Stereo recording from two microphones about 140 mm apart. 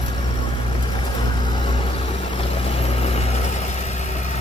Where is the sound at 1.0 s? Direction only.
35° left (ahead or behind).